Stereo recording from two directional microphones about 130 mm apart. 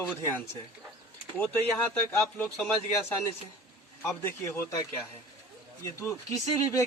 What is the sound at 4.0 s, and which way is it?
Speech, 15° left (ahead or behind).